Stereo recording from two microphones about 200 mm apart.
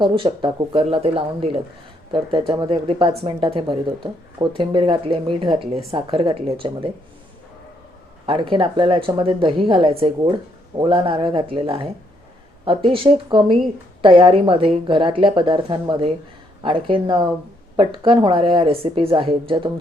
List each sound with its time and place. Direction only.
0.0 s speech: 25° right (ahead or behind)
8.3 s speech: 25° right (ahead or behind)